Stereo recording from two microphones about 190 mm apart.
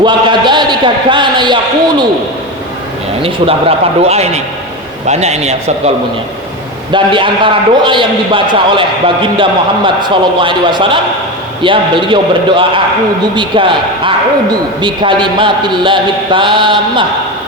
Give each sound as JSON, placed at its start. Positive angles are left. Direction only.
{"t": 0.0, "sound": "a man's voice", "side_deg": -25}
{"t": 3.2, "sound": "a man's voice", "side_deg": -30}
{"t": 6.9, "sound": "a man's voice", "side_deg": -25}